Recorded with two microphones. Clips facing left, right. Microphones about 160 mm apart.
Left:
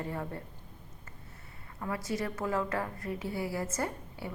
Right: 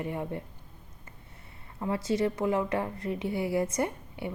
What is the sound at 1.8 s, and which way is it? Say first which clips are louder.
A woman's voice: right 6 dB; 25° right (ahead or behind).